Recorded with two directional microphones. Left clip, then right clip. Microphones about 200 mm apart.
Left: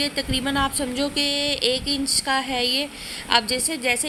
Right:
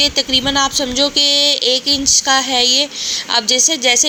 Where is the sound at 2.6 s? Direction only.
60° right (ahead or behind).